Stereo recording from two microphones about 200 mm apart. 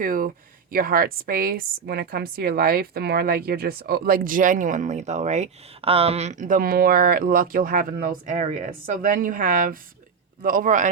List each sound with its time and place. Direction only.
0.0 s a woman's voice: 45° right (ahead or behind)